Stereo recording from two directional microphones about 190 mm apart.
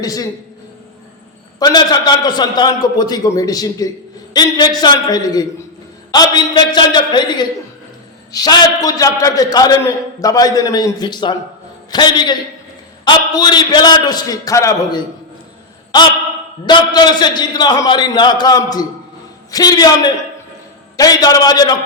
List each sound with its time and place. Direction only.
0.0 s a man's voice: 20° left (ahead or behind)
1.5 s a man's voice: 20° left (ahead or behind)